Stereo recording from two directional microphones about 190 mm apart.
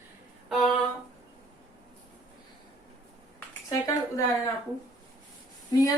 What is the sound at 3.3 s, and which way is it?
Speech, 15° left (ahead or behind).